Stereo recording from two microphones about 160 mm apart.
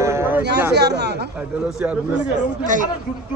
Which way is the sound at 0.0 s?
15° right (ahead or behind).